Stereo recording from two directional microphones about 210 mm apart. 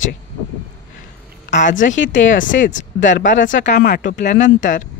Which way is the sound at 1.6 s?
35° left (ahead or behind).